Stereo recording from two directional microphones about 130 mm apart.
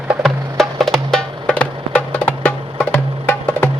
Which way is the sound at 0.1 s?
Centre (ahead or behind).